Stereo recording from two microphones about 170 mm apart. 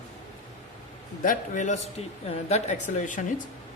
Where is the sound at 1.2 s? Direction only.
50° left (ahead or behind).